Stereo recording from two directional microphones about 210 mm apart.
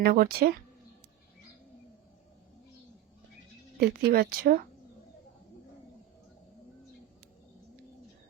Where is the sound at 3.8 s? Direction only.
50° right (ahead or behind).